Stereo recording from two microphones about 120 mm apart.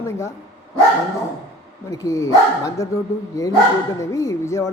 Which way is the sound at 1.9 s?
30° left (ahead or behind).